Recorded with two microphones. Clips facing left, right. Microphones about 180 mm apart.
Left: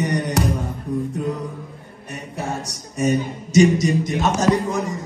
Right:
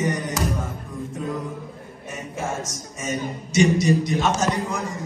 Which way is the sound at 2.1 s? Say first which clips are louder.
Left 1 dB; 70° left (ahead or behind).